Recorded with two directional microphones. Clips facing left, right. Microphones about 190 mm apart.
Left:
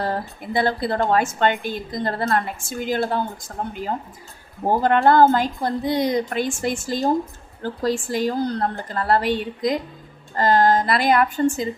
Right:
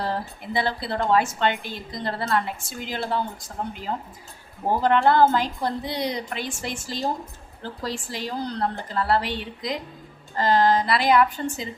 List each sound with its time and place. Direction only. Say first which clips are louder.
0.0 s a woman's voice: left 3 dB; 50° left (ahead or behind)
4.8 s a woman's voice: left 3 dB; 50° left (ahead or behind)